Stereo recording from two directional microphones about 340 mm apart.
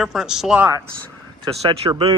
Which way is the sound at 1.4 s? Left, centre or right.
Centre.